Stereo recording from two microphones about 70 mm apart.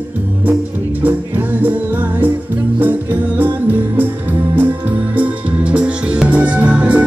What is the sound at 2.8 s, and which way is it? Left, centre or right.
Music, right.